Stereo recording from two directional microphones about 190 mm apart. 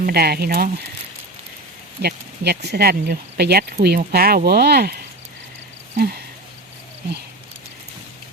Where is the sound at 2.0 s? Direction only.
55° right (ahead or behind).